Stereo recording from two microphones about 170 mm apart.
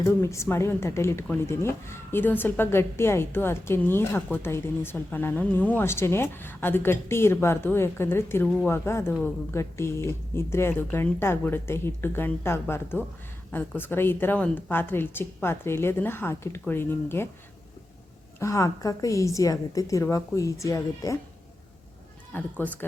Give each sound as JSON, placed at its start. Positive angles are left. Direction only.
{"t": 0.0, "sound": "speech", "side_deg": 15}
{"t": 18.3, "sound": "a woman's voice", "side_deg": 15}
{"t": 22.3, "sound": "speech", "side_deg": 10}